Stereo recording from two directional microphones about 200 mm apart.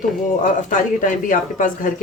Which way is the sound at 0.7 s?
40° left (ahead or behind).